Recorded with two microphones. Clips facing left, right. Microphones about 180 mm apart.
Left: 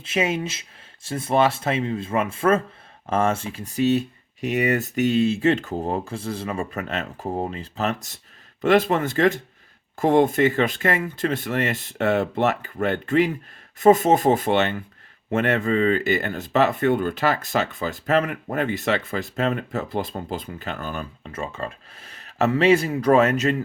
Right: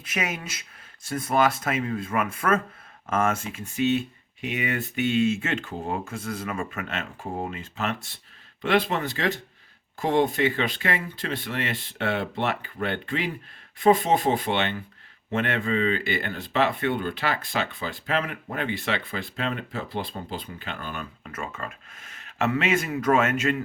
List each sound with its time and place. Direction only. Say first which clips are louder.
0.0 s speech: left 7 dB; 25° left (ahead or behind)